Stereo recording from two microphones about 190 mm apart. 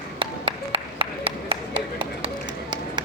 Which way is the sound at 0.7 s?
30° right (ahead or behind).